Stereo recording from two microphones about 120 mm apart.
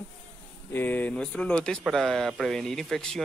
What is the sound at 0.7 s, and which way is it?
Speech, 15° left (ahead or behind).